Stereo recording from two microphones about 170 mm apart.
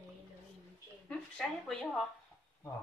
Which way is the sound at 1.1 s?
5° left (ahead or behind).